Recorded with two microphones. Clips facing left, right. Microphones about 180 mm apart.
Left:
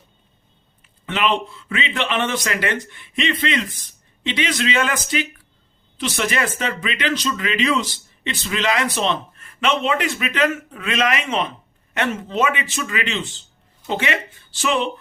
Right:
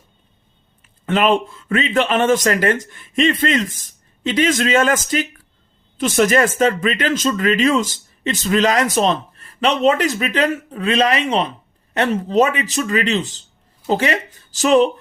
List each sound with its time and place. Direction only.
1.0 s speech: 45° right (ahead or behind)